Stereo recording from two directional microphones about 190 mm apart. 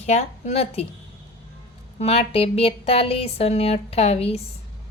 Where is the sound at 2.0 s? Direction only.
30° left (ahead or behind).